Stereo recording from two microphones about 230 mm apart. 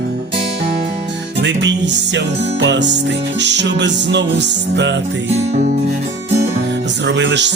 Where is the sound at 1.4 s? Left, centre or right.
Right.